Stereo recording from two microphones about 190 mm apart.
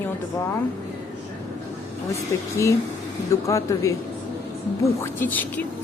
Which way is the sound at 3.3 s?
15° left (ahead or behind).